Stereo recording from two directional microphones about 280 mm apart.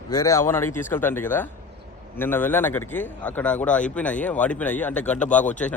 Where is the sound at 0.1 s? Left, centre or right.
Centre.